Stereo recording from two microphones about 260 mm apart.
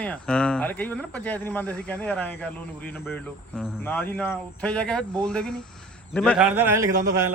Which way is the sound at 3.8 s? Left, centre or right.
Centre.